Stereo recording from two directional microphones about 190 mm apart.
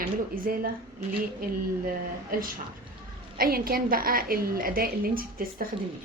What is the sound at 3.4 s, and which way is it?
A woman's voice, 50° right (ahead or behind).